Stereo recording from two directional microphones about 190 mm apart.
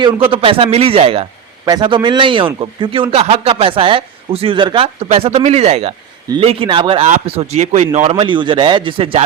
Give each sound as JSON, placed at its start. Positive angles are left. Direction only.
{"t": 0.3, "sound": "a man's voice", "side_deg": -30}